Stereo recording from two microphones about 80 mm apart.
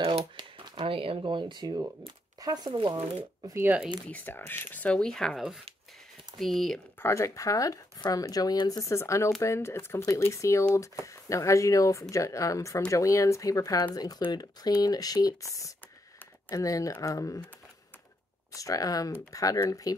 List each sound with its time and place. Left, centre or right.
0.4 s a sound: right
2.4 s speech: right
2.7 s speech: right
3.4 s speech: right
4.1 s speech: left; by 5.4 s centre
6.4 s speech: centre
7.0 s speech: left
8.8 s speech: left
18.5 s speech: left